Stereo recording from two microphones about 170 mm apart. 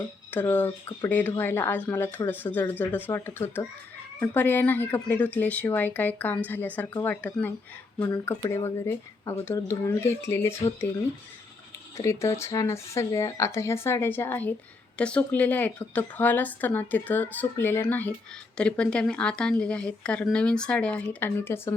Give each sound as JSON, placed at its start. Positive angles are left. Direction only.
{"t": 0.3, "sound": "speech", "side_deg": 10}
{"t": 11.9, "sound": "a woman's voice", "side_deg": 15}